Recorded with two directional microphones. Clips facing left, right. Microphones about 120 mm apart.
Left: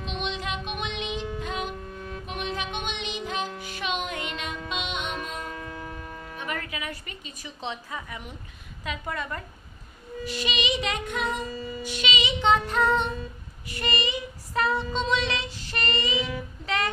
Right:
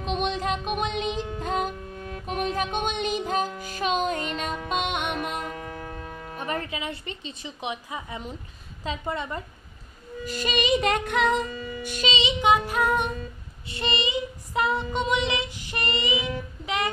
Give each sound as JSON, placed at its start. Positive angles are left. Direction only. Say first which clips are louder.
{"t": 0.0, "sound": "music", "louder": "right 5 dB", "side_deg": -40}
{"t": 4.6, "sound": "music", "louder": "right 5 dB", "side_deg": -50}
{"t": 6.3, "sound": "female singing", "louder": "right 4 dB", "side_deg": -35}
{"t": 10.2, "sound": "music", "louder": "right 3 dB", "side_deg": -45}
{"t": 11.8, "sound": "music", "louder": "right 5 dB", "side_deg": -45}
{"t": 12.1, "sound": "female singing", "louder": "right 2 dB", "side_deg": -25}
{"t": 12.4, "sound": "child singing", "louder": "even", "side_deg": -10}
{"t": 13.7, "sound": "female singing", "louder": "right 1 dB", "side_deg": -25}